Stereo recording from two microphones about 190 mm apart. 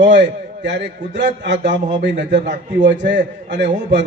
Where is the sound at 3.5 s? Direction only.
70° right (ahead or behind).